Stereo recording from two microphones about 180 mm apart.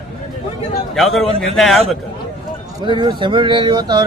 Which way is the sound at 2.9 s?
25° right (ahead or behind).